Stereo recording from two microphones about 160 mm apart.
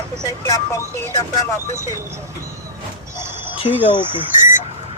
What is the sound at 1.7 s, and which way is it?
Speech, 15° right (ahead or behind).